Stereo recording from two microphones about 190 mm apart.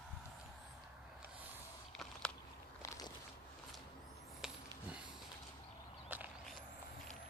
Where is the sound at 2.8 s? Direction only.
15° left (ahead or behind).